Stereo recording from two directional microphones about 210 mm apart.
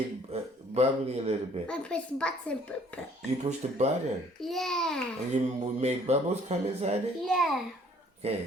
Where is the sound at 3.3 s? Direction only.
30° right (ahead or behind).